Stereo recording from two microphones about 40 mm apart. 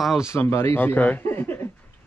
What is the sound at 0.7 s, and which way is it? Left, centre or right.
Speech, left.